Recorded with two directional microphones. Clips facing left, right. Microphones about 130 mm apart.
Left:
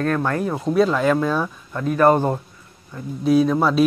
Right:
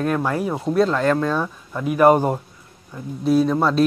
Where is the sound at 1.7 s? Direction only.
10° right (ahead or behind).